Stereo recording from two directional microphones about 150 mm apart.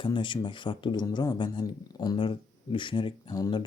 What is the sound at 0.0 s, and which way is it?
Speech, 35° left (ahead or behind).